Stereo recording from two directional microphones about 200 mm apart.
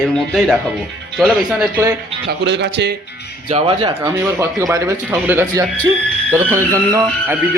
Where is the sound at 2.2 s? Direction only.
60° right (ahead or behind).